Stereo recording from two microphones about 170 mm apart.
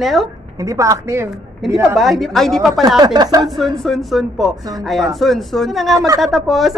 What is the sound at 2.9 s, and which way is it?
Speech, 25° right (ahead or behind).